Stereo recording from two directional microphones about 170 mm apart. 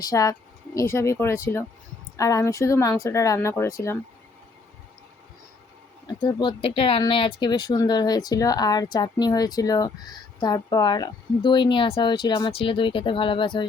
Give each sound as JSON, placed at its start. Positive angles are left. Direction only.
{"t": 0.0, "sound": "speech", "side_deg": 20}
{"t": 6.1, "sound": "speech", "side_deg": 25}